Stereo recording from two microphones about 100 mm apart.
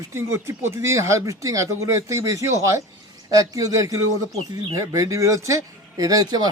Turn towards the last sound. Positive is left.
turn(degrees=-40)  # may be behind; listen again after turning